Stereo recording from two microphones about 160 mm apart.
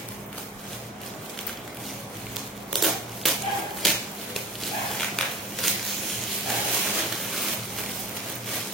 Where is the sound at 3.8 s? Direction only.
Centre (ahead or behind).